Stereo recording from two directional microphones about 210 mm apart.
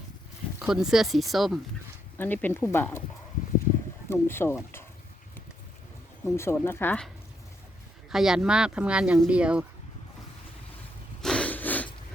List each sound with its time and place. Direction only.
0.6 s speech: centre (ahead or behind)
4.1 s speech: 10° left (ahead or behind)
6.2 s speech: 10° left (ahead or behind)
8.1 s speech: centre (ahead or behind)
11.2 s a sound: 5° left (ahead or behind)